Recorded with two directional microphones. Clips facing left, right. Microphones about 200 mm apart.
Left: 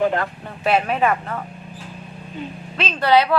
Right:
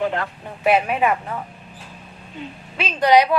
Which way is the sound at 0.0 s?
45° left (ahead or behind).